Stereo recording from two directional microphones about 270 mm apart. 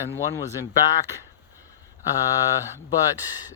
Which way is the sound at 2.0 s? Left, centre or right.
Centre.